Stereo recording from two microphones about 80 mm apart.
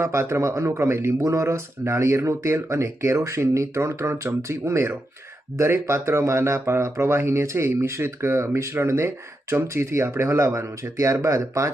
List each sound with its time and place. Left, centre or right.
0.0 s speech: right